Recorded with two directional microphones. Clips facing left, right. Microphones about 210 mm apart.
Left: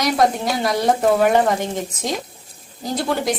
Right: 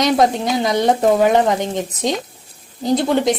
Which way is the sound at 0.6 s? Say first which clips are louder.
Right 2 dB; 20° right (ahead or behind).